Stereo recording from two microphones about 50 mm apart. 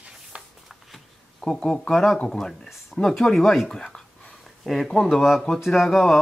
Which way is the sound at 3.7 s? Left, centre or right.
Centre.